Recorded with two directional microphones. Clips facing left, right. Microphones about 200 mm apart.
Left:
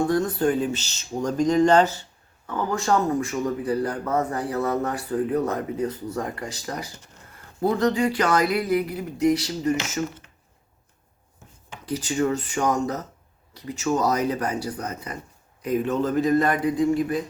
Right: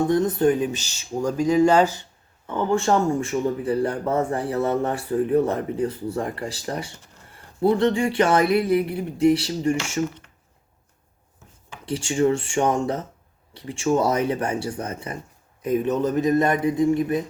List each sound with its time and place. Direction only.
0.1 s speech: 20° right (ahead or behind)
2.5 s speech: 25° right (ahead or behind)
11.9 s speech: 25° right (ahead or behind)